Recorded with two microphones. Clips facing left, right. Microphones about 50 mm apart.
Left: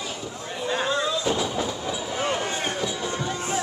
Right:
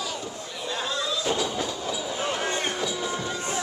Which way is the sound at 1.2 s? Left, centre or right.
Centre.